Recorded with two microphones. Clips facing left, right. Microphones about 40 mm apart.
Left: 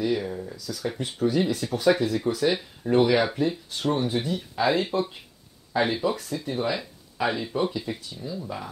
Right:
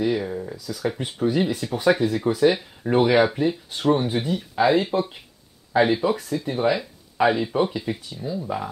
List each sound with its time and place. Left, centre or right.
0.0 s speech: centre